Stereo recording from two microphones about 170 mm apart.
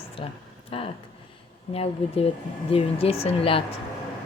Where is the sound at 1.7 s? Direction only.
35° left (ahead or behind).